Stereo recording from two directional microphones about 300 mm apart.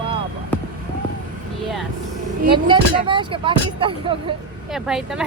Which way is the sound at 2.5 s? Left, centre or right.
Centre.